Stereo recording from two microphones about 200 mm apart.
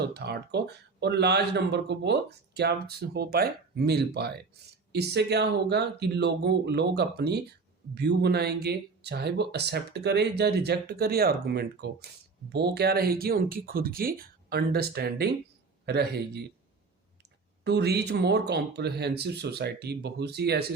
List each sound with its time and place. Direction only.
0.0 s speech: 55° right (ahead or behind)
17.6 s speech: 55° right (ahead or behind)